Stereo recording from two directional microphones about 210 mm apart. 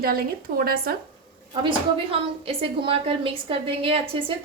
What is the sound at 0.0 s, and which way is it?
Speech, 45° right (ahead or behind).